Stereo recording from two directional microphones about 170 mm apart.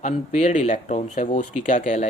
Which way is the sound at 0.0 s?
45° left (ahead or behind).